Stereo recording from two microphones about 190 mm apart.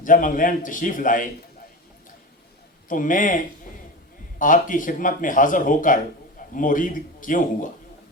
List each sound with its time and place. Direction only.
0.0 s speech: 45° left (ahead or behind)
2.9 s speech: 45° left (ahead or behind)